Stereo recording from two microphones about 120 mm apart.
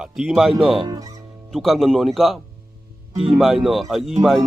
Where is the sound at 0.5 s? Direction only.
45° right (ahead or behind).